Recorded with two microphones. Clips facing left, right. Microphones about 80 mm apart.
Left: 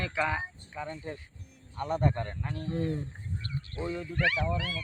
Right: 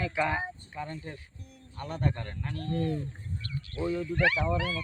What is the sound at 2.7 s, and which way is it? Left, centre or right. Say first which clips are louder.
Speech: right 1 dB; left.